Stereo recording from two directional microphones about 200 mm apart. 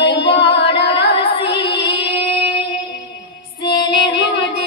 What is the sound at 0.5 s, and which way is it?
Carnatic music, 60° left (ahead or behind).